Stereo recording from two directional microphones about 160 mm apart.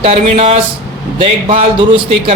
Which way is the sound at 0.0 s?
40° right (ahead or behind).